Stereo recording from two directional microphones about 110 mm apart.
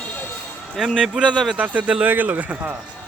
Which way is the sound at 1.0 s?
10° right (ahead or behind).